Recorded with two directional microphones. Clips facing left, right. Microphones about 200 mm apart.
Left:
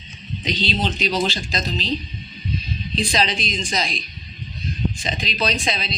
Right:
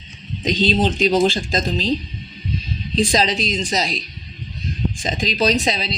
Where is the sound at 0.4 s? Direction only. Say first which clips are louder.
Right 6 dB; 45° right (ahead or behind).